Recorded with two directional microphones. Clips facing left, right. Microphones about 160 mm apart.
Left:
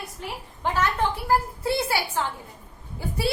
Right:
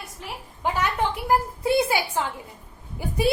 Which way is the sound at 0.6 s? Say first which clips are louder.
Even; 15° right (ahead or behind).